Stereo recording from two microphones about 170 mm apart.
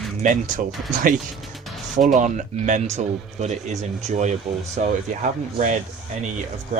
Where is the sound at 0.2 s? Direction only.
50° right (ahead or behind).